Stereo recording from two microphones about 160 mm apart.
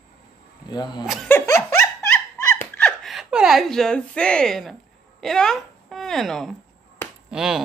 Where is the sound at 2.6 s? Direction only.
10° left (ahead or behind).